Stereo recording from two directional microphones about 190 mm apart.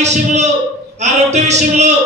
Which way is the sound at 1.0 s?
35° right (ahead or behind).